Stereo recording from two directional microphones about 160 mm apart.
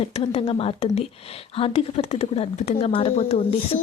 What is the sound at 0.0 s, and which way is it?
Speech, 40° left (ahead or behind).